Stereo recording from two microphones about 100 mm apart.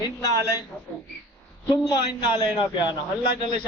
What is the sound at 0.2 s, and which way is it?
Child singing, 35° left (ahead or behind).